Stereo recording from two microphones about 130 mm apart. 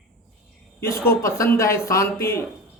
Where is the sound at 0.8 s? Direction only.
20° left (ahead or behind).